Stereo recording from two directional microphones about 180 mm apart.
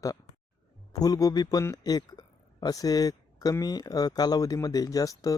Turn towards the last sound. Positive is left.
turn(degrees=20)  # may be behind; listen again after turning